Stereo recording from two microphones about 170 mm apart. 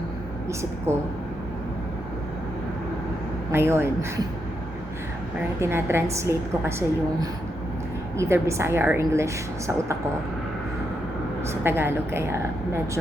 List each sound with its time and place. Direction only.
0.9 s a woman's voice: 15° right (ahead or behind)
3.5 s a woman's voice: 15° right (ahead or behind)
5.5 s a woman's voice: 15° right (ahead or behind)
11.6 s a woman's voice: 15° right (ahead or behind)